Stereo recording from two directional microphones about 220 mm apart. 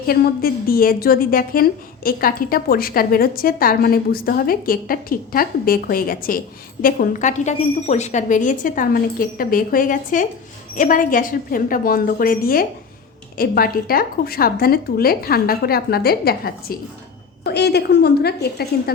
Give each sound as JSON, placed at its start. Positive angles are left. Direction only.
{"t": 0.1, "sound": "a woman's voice", "side_deg": 40}